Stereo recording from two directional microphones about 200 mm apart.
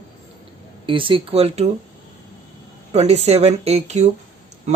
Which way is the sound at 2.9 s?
35° right (ahead or behind).